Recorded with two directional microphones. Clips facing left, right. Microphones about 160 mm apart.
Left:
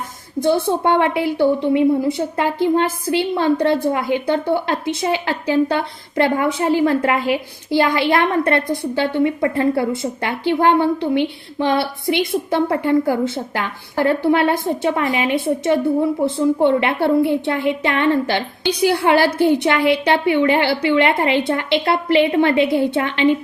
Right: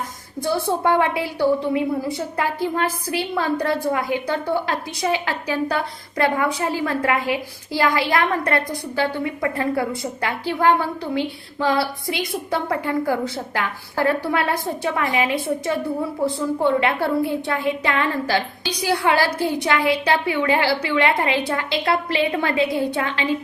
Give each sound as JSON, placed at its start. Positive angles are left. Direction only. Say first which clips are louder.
{"t": 0.4, "sound": "a woman's voice", "louder": "left 4 dB", "side_deg": 25}